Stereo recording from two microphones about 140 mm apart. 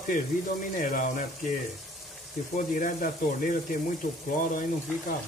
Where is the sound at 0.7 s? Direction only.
75° left (ahead or behind).